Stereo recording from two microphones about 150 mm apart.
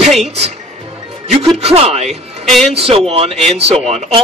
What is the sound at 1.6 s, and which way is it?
Speech, 40° right (ahead or behind).